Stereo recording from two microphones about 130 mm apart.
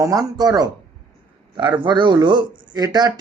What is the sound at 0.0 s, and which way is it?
Speech, 25° right (ahead or behind).